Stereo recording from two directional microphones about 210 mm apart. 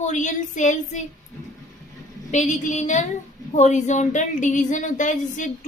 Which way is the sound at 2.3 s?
35° left (ahead or behind).